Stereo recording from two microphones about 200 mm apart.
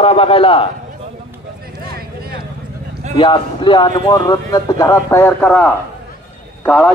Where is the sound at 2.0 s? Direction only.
50° right (ahead or behind).